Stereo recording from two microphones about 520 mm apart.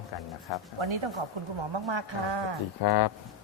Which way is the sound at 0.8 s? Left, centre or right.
Right.